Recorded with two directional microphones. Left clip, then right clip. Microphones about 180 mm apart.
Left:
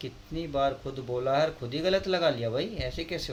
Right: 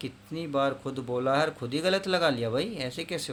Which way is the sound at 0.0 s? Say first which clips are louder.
Even; 35° right (ahead or behind).